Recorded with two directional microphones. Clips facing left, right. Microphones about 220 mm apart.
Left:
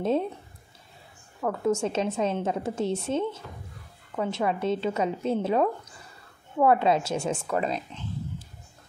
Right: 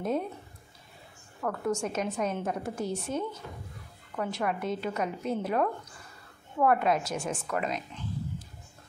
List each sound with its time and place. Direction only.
0.0 s a woman's voice: 30° left (ahead or behind)
1.4 s a woman's voice: 25° left (ahead or behind)